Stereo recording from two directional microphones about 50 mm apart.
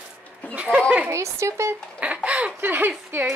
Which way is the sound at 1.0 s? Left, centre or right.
Right.